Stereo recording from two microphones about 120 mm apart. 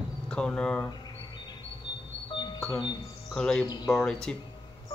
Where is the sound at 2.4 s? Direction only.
40° left (ahead or behind).